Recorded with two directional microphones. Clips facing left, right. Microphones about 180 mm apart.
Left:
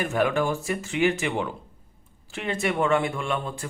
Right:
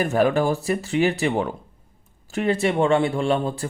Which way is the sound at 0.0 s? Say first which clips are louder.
Right 4 dB; 35° right (ahead or behind).